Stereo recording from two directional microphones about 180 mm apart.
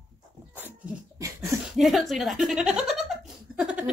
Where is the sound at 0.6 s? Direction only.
15° right (ahead or behind).